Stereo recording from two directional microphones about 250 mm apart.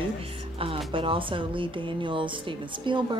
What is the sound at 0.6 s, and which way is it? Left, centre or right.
A woman's voice, right.